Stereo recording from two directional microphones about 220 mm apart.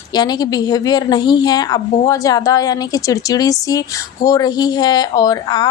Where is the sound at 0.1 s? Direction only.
20° left (ahead or behind).